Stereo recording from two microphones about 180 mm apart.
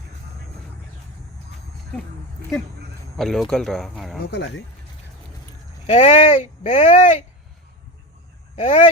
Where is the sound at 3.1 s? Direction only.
Centre (ahead or behind).